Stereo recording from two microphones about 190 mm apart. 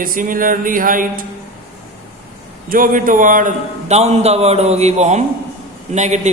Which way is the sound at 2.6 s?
45° right (ahead or behind).